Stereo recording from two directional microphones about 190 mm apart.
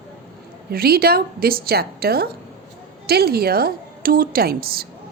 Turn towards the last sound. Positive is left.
turn(degrees=-50)  # may be behind; listen again after turning